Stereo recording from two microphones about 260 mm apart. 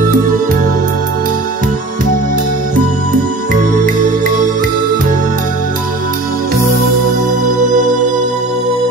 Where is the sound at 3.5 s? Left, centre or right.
Right.